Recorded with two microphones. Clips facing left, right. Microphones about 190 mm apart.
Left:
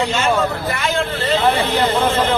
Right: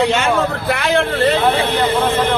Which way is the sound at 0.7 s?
70° right (ahead or behind).